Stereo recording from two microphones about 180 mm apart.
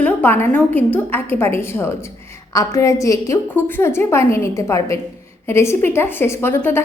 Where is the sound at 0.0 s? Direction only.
10° left (ahead or behind).